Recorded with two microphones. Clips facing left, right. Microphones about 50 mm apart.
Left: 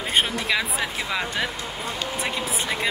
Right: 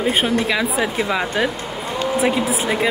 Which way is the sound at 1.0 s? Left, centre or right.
Centre.